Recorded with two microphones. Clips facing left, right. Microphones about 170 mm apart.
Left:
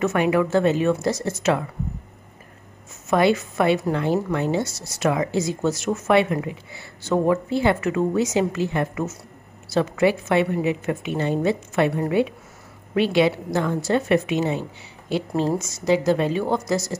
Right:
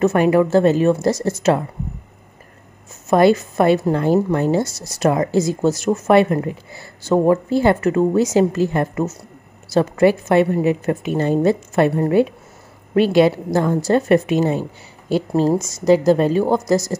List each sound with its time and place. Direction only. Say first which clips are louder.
0.0 s a woman's voice: right 5 dB; 40° right (ahead or behind)
3.1 s a woman's voice: right 5 dB; 40° right (ahead or behind)